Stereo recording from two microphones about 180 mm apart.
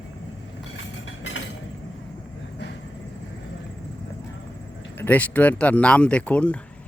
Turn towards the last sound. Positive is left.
turn(degrees=5)  # may be behind; listen again after turning